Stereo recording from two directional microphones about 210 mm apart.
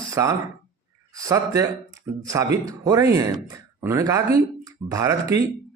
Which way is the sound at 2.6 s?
15° right (ahead or behind).